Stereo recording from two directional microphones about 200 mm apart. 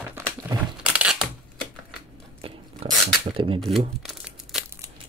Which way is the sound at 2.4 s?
35° right (ahead or behind).